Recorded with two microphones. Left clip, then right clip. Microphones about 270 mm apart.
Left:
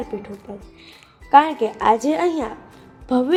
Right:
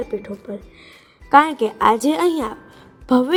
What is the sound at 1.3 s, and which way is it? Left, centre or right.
A woman's voice, right.